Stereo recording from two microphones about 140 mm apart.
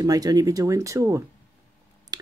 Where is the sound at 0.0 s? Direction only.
25° right (ahead or behind).